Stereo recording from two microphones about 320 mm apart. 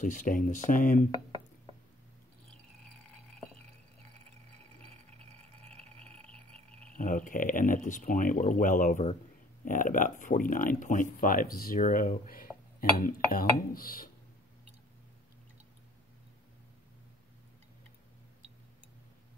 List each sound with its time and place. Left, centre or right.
0.0 s speech: left
5.6 s a sound: centre
7.0 s speech: left